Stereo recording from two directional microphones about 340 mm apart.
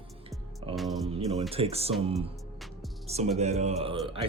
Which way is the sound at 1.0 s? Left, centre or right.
Centre.